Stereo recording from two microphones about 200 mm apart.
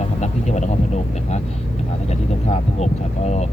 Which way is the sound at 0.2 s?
35° left (ahead or behind).